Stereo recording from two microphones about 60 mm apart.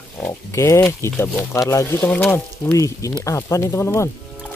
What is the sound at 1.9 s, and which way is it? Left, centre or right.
Speech, left.